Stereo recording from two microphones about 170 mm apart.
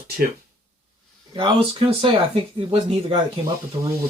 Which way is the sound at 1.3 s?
30° right (ahead or behind).